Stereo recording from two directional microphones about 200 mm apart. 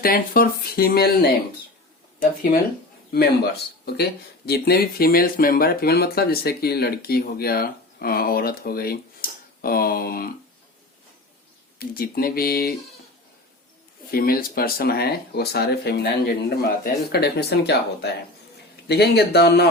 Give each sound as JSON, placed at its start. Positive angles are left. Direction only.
{"t": 0.0, "sound": "speech", "side_deg": 45}
{"t": 11.8, "sound": "speech", "side_deg": 50}
{"t": 14.1, "sound": "speech", "side_deg": 45}